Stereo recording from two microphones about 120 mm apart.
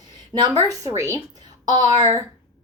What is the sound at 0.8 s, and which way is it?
A woman's voice, 25° right (ahead or behind).